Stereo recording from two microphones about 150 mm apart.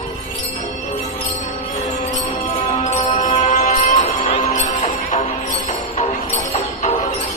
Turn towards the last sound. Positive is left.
turn(degrees=55)  # may be behind; listen again after turning